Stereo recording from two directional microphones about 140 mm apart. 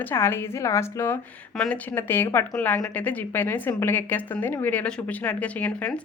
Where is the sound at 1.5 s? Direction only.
5° left (ahead or behind).